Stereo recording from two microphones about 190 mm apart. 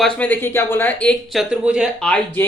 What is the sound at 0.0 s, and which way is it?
Speech, 5° left (ahead or behind).